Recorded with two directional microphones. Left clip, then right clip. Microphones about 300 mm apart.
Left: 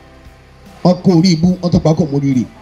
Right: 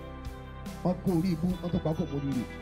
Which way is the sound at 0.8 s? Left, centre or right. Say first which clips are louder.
Left 18 dB; left.